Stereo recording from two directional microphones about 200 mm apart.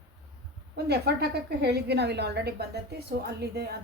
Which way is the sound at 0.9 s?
55° right (ahead or behind).